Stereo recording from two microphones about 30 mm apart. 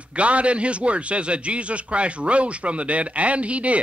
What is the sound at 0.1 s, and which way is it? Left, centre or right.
A man's voice, right.